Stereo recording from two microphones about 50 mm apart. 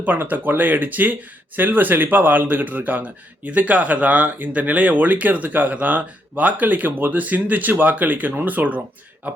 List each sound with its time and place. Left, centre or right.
0.0 s a man's voice: right